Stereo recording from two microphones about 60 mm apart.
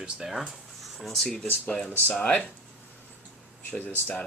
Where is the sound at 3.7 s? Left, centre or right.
Centre.